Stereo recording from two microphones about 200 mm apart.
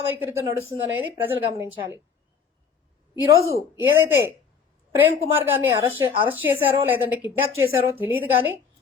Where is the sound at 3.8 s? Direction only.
10° right (ahead or behind).